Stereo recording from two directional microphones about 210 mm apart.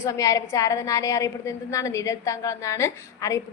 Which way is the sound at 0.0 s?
15° left (ahead or behind).